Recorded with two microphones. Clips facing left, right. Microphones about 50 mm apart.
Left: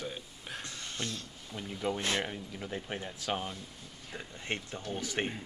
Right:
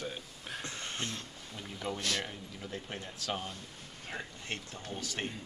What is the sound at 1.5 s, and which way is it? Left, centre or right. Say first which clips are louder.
Speech: left 4 dB; centre.